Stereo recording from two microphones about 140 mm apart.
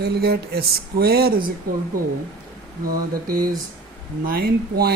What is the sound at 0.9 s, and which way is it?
Speech, 90° right.